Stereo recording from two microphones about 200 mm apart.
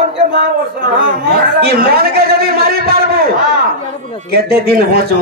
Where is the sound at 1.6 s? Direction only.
50° right (ahead or behind).